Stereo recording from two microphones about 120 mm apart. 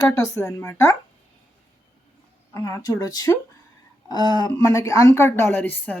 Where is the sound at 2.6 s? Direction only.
30° left (ahead or behind).